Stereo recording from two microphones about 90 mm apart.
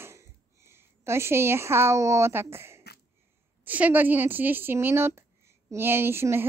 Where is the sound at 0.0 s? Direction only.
30° right (ahead or behind).